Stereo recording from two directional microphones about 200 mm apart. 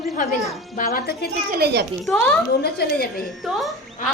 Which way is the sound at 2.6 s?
50° left (ahead or behind).